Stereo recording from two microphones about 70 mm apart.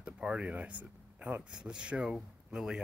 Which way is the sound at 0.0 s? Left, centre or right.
Centre.